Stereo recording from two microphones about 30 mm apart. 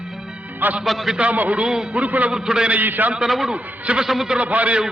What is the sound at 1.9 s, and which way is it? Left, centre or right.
Speech, right.